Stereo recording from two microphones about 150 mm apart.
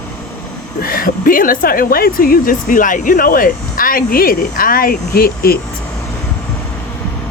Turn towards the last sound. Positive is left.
turn(degrees=90)